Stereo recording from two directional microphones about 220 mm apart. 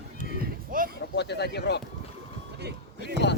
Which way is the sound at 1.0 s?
50° left (ahead or behind).